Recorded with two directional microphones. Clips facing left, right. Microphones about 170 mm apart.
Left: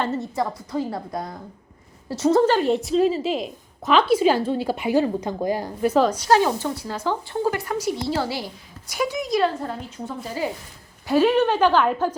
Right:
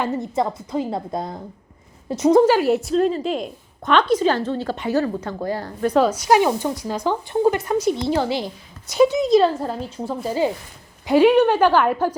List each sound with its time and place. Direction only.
0.0 s a woman's voice: 20° right (ahead or behind); by 6.1 s 5° left (ahead or behind)
6.1 s a woman's voice: 10° right (ahead or behind); by 10.5 s 30° right (ahead or behind)
11.0 s speech: 15° right (ahead or behind)